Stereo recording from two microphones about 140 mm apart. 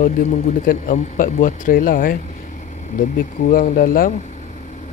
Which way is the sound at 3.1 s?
90° left.